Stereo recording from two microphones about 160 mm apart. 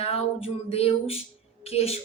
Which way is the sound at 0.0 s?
40° left (ahead or behind).